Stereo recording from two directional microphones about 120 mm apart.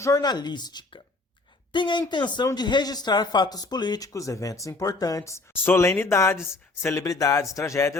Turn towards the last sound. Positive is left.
turn(degrees=25)  # may be behind; listen again after turning